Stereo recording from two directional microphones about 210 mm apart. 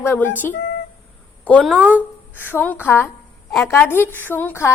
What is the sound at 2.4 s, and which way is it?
A woman's voice, 10° left (ahead or behind).